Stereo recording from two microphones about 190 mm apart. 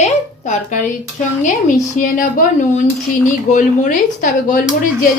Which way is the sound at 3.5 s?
40° left (ahead or behind).